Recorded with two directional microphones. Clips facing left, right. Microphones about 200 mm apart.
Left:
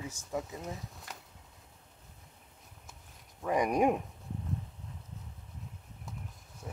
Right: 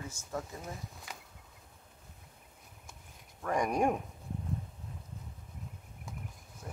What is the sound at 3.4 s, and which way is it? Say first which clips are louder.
Speech: left 2 dB; 15° left (ahead or behind).